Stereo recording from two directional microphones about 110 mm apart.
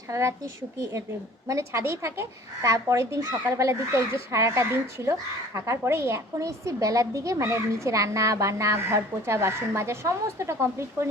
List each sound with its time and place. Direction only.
0.1 s a woman's voice: 25° right (ahead or behind)
1.5 s a woman's voice: 25° right (ahead or behind)